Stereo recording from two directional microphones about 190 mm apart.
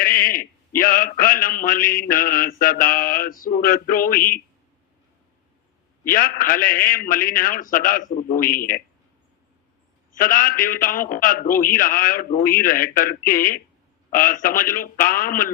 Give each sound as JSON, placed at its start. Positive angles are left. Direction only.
{"t": 0.0, "sound": "a sound", "side_deg": 50}
{"t": 0.8, "sound": "a man's voice", "side_deg": 50}
{"t": 6.1, "sound": "a man's voice", "side_deg": 50}
{"t": 10.2, "sound": "a man's voice", "side_deg": 50}